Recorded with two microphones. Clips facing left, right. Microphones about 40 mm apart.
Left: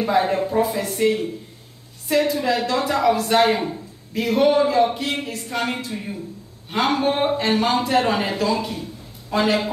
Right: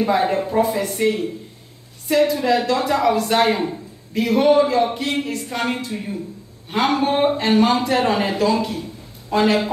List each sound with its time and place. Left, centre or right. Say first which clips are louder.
0.0 s speech: right 1 dB; centre